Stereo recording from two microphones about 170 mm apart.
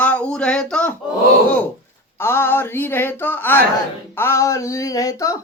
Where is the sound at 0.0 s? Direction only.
10° left (ahead or behind).